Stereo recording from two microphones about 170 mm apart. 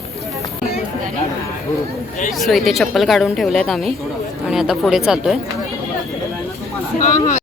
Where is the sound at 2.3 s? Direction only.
Centre (ahead or behind).